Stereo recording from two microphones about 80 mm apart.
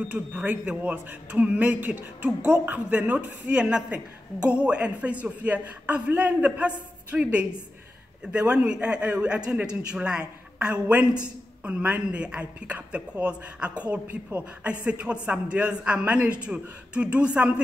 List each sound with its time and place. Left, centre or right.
0.1 s speech: right